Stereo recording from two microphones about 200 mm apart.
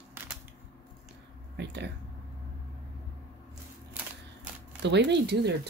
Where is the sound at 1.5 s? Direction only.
60° right (ahead or behind).